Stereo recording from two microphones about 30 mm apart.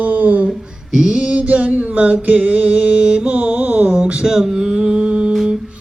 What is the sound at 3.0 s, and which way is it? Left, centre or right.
Mantra, right.